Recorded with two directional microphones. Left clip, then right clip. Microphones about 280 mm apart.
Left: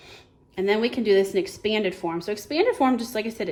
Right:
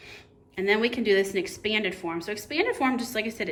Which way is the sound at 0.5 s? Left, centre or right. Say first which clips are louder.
Left 1 dB; centre.